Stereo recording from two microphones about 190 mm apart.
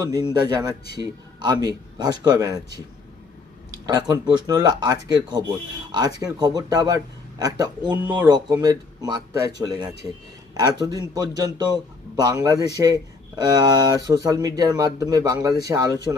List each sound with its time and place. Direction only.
0.1 s speech: 20° right (ahead or behind)
4.5 s speech: 20° right (ahead or behind)
7.8 s speech: 10° right (ahead or behind)
8.3 s speech: 20° right (ahead or behind)